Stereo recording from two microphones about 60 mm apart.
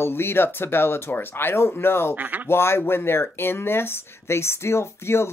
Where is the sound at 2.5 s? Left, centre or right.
Left.